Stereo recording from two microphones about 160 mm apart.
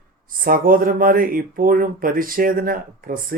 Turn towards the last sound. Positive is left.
turn(degrees=-60)  # may be behind; listen again after turning